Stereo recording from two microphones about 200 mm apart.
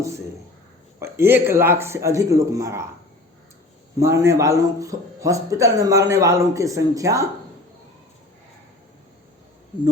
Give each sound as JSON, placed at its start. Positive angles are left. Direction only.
{"t": 0.9, "sound": "a man's voice", "side_deg": -15}
{"t": 3.9, "sound": "a man's voice", "side_deg": -15}